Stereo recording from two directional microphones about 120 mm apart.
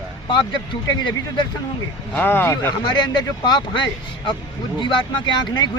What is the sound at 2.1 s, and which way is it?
Speech, 15° left (ahead or behind).